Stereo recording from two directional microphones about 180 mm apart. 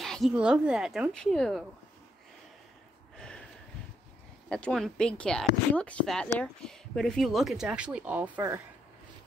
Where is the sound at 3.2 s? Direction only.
5° left (ahead or behind).